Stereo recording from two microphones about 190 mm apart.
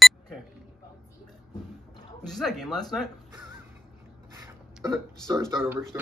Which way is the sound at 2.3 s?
Centre (ahead or behind).